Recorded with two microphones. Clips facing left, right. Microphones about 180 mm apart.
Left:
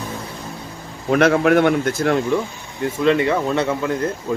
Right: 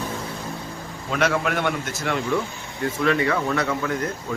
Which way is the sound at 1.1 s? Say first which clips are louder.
Left 9 dB; 55° left (ahead or behind).